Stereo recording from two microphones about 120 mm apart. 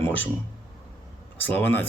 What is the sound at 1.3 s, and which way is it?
Speech, 15° left (ahead or behind).